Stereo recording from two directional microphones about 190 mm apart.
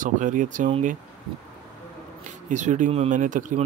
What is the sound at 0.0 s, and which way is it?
Speech, 45° right (ahead or behind).